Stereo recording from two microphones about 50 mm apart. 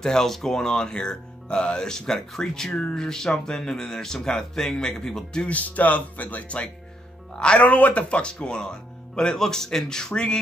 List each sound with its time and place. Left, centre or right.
0.0 s speech: centre
5.5 s speech: left
7.3 s speech: centre
7.6 s speech: left